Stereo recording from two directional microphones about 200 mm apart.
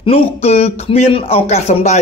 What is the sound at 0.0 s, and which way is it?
Speech, 30° left (ahead or behind).